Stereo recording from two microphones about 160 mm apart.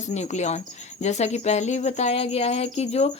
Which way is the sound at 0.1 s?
45° left (ahead or behind).